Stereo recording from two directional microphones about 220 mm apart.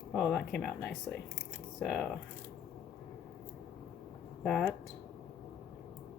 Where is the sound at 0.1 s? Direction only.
Centre (ahead or behind).